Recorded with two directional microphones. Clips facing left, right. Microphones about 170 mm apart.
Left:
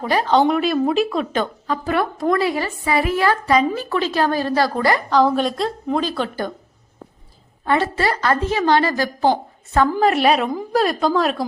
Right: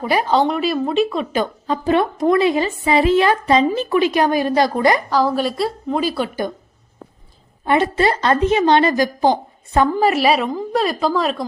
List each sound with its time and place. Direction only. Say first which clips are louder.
0.0 s a woman's voice: even; 10° right (ahead or behind)
1.6 s a woman's voice: right 4 dB; 20° right (ahead or behind)
5.0 s a woman's voice: left 1 dB; 5° right (ahead or behind)
7.6 s a woman's voice: right 3 dB; 20° right (ahead or behind)
10.0 s a woman's voice: even; 5° right (ahead or behind)